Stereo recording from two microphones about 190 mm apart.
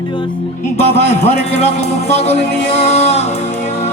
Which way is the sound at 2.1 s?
35° left (ahead or behind).